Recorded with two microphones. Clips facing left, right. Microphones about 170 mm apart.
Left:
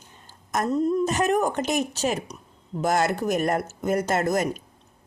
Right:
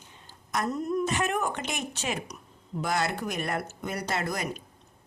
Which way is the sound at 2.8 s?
45° left (ahead or behind).